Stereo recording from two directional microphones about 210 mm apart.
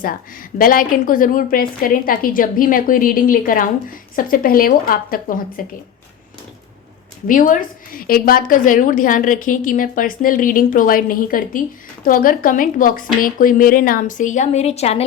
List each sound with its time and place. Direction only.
0.6 s a woman's voice: 40° left (ahead or behind)
7.3 s a woman's voice: 40° left (ahead or behind)